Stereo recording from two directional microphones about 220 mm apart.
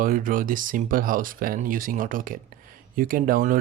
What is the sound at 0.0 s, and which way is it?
Speech, 40° right (ahead or behind).